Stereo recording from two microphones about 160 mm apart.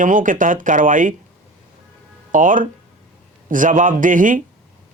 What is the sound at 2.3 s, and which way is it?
Speech, 55° right (ahead or behind).